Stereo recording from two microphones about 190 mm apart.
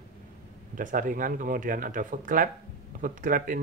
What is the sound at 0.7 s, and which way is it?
Speech, 45° right (ahead or behind).